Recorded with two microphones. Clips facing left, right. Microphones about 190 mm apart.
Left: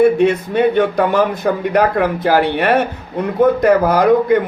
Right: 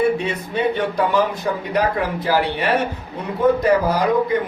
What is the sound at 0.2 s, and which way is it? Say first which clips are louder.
A man's voice: left 8 dB; 55° left (ahead or behind).